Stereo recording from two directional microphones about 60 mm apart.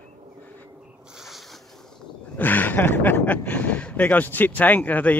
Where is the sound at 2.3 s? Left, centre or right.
Left.